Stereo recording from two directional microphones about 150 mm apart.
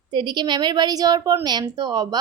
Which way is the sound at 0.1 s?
30° right (ahead or behind).